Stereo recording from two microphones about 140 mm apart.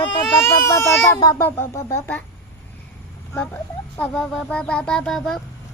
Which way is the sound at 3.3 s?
10° left (ahead or behind).